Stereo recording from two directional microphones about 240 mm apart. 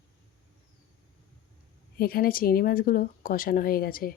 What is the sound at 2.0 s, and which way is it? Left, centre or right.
Speech, left.